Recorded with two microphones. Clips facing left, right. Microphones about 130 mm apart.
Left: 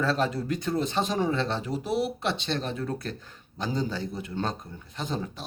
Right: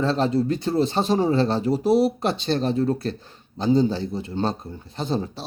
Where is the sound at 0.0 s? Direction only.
30° right (ahead or behind).